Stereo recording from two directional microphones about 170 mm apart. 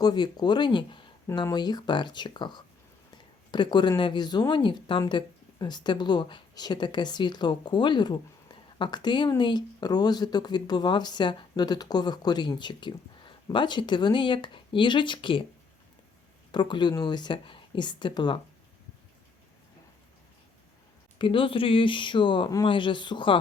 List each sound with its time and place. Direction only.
0.0 s speech: 25° left (ahead or behind)
16.5 s speech: 25° left (ahead or behind)
21.2 s speech: 30° left (ahead or behind)